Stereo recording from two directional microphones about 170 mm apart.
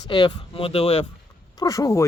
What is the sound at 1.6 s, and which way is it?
Speech, 20° left (ahead or behind).